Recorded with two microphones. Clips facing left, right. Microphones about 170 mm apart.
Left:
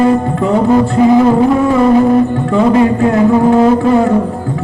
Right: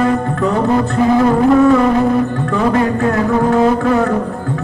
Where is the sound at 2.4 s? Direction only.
20° left (ahead or behind).